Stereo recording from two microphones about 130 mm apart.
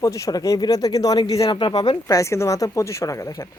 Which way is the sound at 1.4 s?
40° left (ahead or behind).